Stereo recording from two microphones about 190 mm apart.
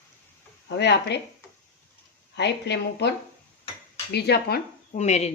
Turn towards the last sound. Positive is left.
turn(degrees=35)  # may be behind; listen again after turning